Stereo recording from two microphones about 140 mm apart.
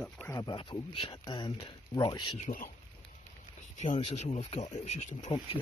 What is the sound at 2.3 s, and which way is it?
Speech, 65° left (ahead or behind).